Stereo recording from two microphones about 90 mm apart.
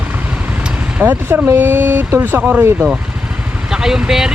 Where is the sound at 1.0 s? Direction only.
25° right (ahead or behind).